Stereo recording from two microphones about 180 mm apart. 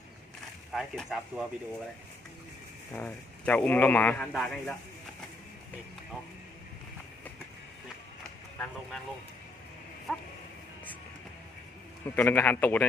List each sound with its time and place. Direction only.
0.7 s speech: centre (ahead or behind)
2.9 s speech: 10° left (ahead or behind)
8.5 s speech: 10° left (ahead or behind)
12.0 s speech: 10° left (ahead or behind)